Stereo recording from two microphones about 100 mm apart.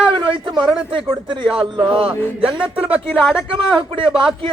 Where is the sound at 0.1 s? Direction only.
55° right (ahead or behind).